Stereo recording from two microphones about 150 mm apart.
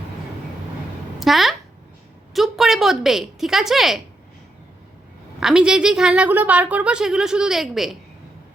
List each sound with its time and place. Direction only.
1.2 s a woman's voice: centre (ahead or behind)
5.4 s a woman's voice: 5° right (ahead or behind)